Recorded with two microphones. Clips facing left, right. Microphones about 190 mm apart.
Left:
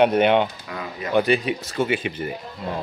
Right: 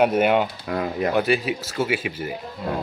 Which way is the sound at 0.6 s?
50° right (ahead or behind).